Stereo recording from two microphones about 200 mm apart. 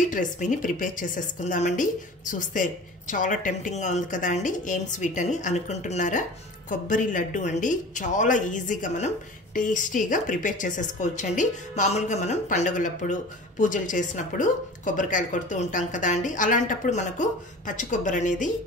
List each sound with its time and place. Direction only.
0.1 s a woman's voice: 40° left (ahead or behind)